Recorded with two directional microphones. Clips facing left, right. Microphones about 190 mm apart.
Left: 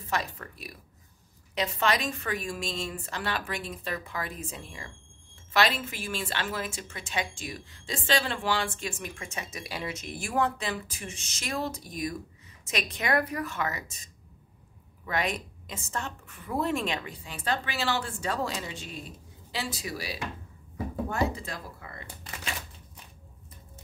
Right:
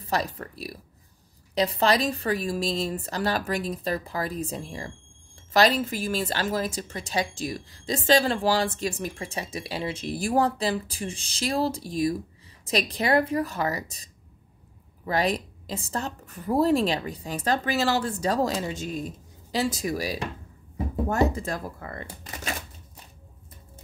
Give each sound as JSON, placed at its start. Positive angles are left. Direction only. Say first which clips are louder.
{"t": 0.0, "sound": "a woman's voice", "louder": "right 4 dB", "side_deg": -35}